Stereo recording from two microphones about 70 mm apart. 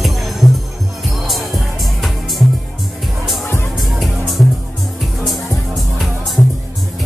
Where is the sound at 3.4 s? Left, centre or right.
Left.